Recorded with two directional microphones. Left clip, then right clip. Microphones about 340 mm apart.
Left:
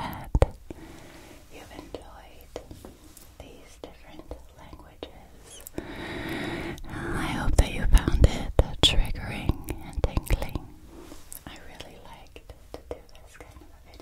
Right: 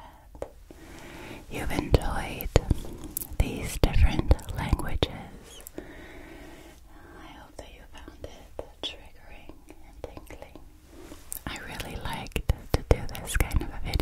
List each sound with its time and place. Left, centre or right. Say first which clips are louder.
1.5 s whispering: right 14 dB; right
5.9 s whispering: left 12 dB; left
10.0 s whispering: left 10 dB; left
11.4 s whispering: right 8 dB; right